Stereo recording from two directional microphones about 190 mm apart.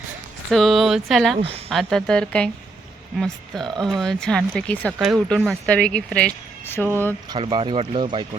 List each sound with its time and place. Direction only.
0.5 s speech: centre (ahead or behind)
1.4 s speech: 30° right (ahead or behind)
1.7 s speech: centre (ahead or behind)
7.3 s speech: 25° right (ahead or behind)